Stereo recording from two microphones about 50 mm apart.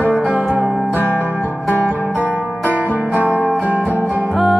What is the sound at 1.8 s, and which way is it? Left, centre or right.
Music, right.